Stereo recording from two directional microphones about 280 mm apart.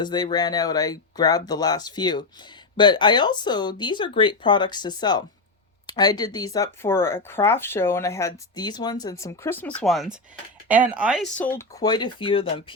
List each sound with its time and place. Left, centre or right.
0.0 s speech: centre
11.3 s speech: centre